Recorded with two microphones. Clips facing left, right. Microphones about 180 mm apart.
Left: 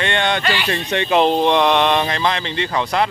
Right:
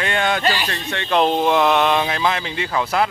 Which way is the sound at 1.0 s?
Centre (ahead or behind).